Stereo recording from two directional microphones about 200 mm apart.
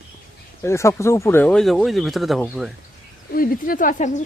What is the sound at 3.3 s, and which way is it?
Speech, 45° left (ahead or behind).